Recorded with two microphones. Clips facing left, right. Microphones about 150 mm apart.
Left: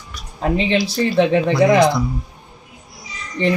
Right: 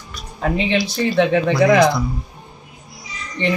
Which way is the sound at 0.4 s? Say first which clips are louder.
Left 1 dB; 30° left (ahead or behind).